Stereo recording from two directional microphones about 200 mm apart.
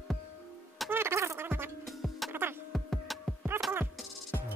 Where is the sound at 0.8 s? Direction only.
10° right (ahead or behind).